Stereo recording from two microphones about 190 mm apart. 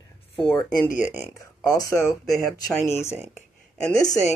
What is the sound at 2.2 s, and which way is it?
Speech, centre (ahead or behind).